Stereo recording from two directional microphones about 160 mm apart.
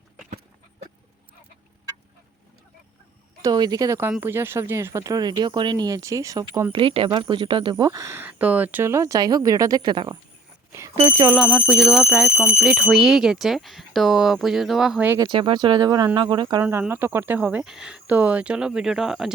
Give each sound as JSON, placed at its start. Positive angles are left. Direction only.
{"t": 3.4, "sound": "speech", "side_deg": -25}
{"t": 6.7, "sound": "speech", "side_deg": -35}
{"t": 10.7, "sound": "smoke detector", "side_deg": -20}
{"t": 11.3, "sound": "speech", "side_deg": 0}
{"t": 15.2, "sound": "speech", "side_deg": -30}
{"t": 16.6, "sound": "speech", "side_deg": -10}